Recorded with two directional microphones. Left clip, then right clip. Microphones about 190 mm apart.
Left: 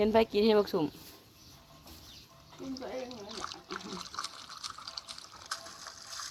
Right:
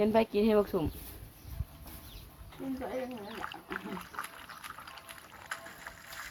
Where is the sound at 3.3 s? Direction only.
10° right (ahead or behind).